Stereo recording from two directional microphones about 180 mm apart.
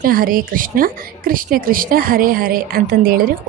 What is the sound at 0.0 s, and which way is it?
A woman's voice, 50° right (ahead or behind).